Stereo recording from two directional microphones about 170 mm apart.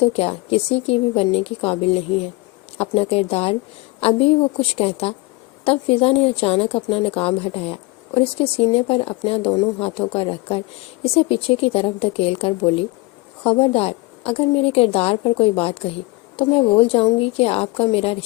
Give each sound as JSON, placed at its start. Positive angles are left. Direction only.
{"t": 0.0, "sound": "a woman's voice", "side_deg": 35}